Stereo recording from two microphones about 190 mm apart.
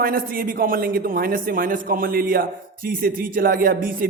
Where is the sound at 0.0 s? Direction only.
50° right (ahead or behind).